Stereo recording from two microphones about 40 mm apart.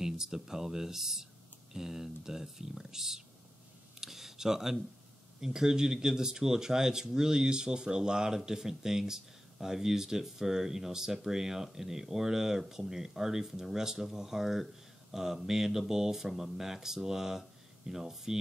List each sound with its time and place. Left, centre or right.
0.0 s speech: centre
4.0 s a sound: centre
5.4 s speech: centre